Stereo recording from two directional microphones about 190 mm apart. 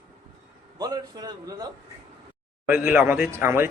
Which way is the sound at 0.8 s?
20° right (ahead or behind).